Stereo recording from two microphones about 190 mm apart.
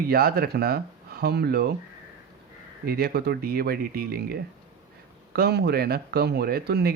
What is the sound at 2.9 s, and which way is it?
Speech, 55° right (ahead or behind).